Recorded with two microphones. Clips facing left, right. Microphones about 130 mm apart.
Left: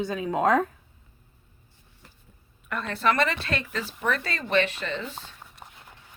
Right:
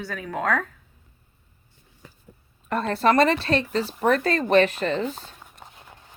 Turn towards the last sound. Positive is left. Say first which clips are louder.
# right 1 dB
turn(degrees=-40)  # may be behind; listen again after turning